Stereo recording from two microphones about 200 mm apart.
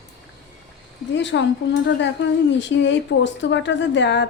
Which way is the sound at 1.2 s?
65° left (ahead or behind).